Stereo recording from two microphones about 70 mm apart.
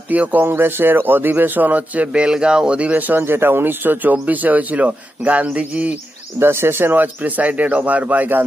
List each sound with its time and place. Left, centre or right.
0.1 s speech: right
6.4 s speech: right